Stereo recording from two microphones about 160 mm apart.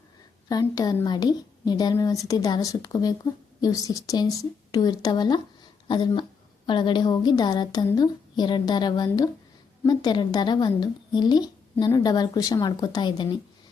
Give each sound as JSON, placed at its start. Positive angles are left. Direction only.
{"t": 0.4, "sound": "a woman's voice", "side_deg": 25}